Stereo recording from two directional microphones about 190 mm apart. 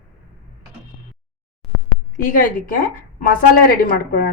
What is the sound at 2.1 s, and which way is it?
A woman's voice, 45° left (ahead or behind).